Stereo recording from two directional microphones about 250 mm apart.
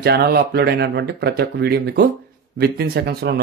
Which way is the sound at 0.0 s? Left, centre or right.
Right.